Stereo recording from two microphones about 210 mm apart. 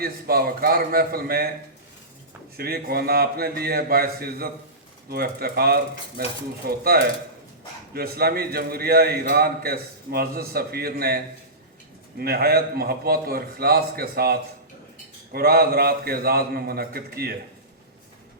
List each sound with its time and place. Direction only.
0.0 s a man's voice: 45° right (ahead or behind)
2.6 s a man's voice: 45° right (ahead or behind)
12.2 s a man's voice: 45° right (ahead or behind)